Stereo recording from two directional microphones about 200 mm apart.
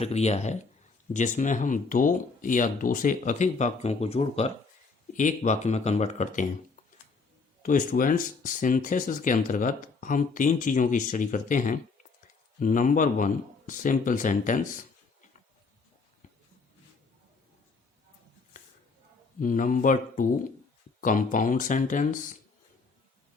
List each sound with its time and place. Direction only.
0.0 s speech: 35° left (ahead or behind)
7.6 s speech: 40° left (ahead or behind)
19.4 s speech: 40° left (ahead or behind)